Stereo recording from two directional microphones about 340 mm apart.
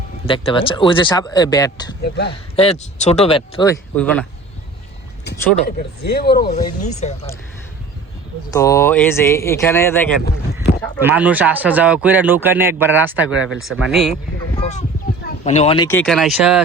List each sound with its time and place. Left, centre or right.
0.3 s speech: centre
2.0 s speech: left
2.6 s speech: centre
5.6 s speech: left
8.4 s speech: centre
10.6 s a man's voice: centre
14.6 s speech: centre